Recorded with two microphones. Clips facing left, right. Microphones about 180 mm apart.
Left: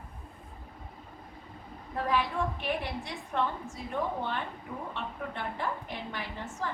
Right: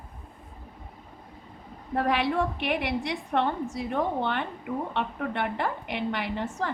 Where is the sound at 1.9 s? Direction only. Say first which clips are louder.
Right 5 dB; 75° right (ahead or behind).